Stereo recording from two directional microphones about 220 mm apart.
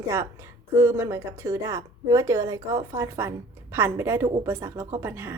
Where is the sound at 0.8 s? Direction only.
10° right (ahead or behind).